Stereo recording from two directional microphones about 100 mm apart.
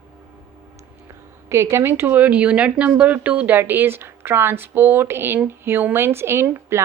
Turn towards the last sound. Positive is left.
turn(degrees=-25)  # may be behind; listen again after turning